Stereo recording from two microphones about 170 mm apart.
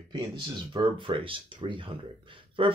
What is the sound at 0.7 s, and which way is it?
Speech, 30° right (ahead or behind).